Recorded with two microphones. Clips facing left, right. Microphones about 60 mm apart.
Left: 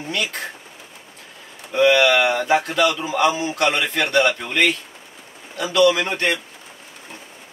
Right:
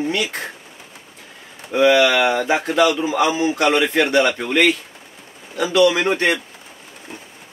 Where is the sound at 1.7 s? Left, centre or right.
Right.